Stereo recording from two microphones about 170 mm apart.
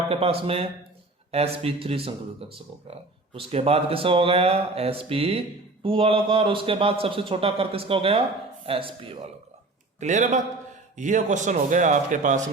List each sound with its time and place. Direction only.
0.1 s a man's voice: 35° right (ahead or behind)
10.0 s a man's voice: 45° right (ahead or behind)